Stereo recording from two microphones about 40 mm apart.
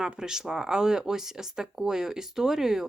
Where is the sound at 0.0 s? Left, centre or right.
Centre.